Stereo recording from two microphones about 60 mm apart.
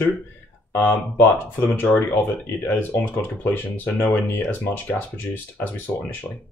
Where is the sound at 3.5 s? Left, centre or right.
Left.